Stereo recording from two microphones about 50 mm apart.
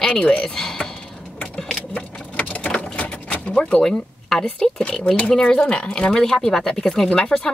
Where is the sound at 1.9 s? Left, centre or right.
Left.